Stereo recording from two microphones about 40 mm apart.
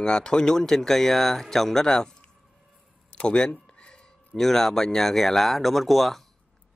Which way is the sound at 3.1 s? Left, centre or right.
Left.